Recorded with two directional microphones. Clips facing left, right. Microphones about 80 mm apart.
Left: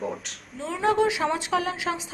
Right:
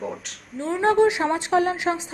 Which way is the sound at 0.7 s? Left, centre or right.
Right.